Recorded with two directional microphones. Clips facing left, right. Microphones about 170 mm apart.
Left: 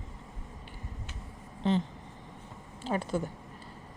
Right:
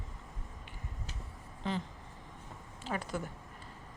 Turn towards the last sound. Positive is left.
turn(degrees=25)  # may be behind; listen again after turning